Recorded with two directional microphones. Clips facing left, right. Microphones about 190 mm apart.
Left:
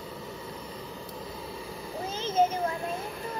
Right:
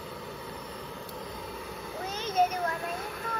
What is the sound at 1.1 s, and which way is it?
Vehicle, 5° left (ahead or behind).